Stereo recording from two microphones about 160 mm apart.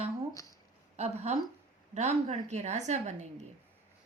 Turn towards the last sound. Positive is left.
turn(degrees=-45)  # may be behind; listen again after turning